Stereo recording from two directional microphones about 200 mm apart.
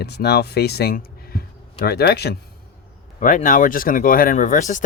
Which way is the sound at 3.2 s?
40° left (ahead or behind).